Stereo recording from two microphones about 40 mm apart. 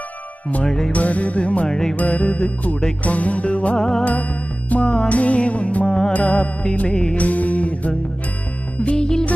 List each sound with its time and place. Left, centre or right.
0.7 s music: centre
0.9 s music: left
1.7 s music: centre
2.0 s music: left
3.7 s music: centre
4.0 s music: left
5.9 s music: centre
6.1 s music: left
6.9 s music: centre
7.2 s music: left
8.9 s music: centre